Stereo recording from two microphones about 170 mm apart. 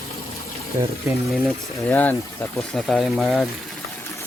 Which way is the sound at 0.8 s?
30° right (ahead or behind).